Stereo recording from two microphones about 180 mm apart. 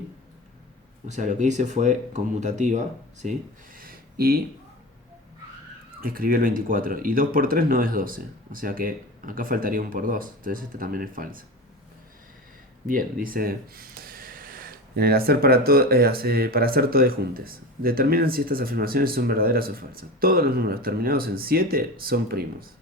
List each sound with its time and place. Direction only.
1.0 s speech: 40° right (ahead or behind)
6.0 s speech: 55° right (ahead or behind)
12.9 s speech: 50° right (ahead or behind)